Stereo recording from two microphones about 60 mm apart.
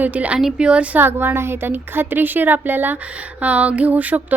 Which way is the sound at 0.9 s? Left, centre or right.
Right.